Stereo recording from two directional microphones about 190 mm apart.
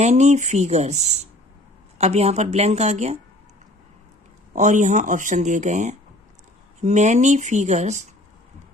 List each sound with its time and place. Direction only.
0.0 s speech: 35° right (ahead or behind)
4.5 s speech: 40° right (ahead or behind)